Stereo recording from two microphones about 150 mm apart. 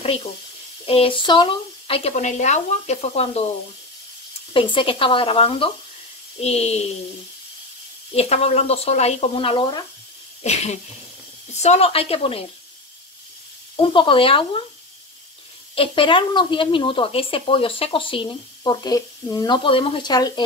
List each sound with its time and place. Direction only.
0.0 s speech: 40° left (ahead or behind)
2.1 s speech: 50° left (ahead or behind)
4.6 s speech: 35° left (ahead or behind)
8.1 s speech: 45° left (ahead or behind)
10.4 s speech: 50° left (ahead or behind)
13.7 s speech: 35° left (ahead or behind)
15.7 s speech: 35° left (ahead or behind)